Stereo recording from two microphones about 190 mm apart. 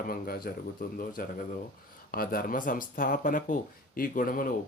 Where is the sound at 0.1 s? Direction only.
50° left (ahead or behind).